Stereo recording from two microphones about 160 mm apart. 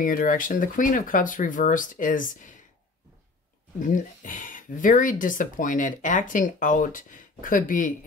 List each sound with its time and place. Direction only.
0.0 s speech: 55° left (ahead or behind)
3.8 s speech: 55° left (ahead or behind)